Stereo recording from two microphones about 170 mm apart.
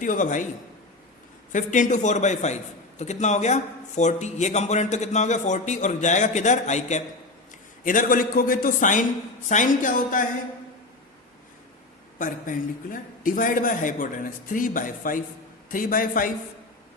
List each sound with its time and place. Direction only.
0.0 s a man's voice: 50° left (ahead or behind)
1.5 s a man's voice: 50° left (ahead or behind)
12.2 s a man's voice: 50° left (ahead or behind)